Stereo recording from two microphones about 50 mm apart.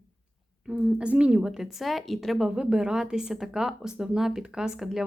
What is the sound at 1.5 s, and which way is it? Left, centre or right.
Speech, centre.